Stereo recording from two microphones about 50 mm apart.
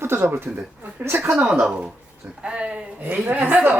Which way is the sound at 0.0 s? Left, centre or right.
Right.